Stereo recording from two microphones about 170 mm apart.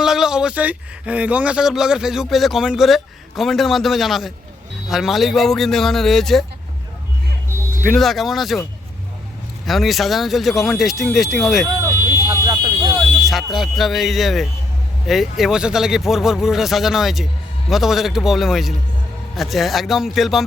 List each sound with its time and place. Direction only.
0.0 s speech: 5° right (ahead or behind)
7.9 s speech: centre (ahead or behind)
9.6 s speech: centre (ahead or behind)
11.9 s vehicle: 15° right (ahead or behind)
12.5 s a sound: 25° right (ahead or behind)
13.2 s speech: centre (ahead or behind)